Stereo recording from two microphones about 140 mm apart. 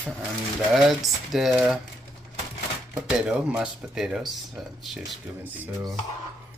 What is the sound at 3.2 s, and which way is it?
Speech, 10° right (ahead or behind).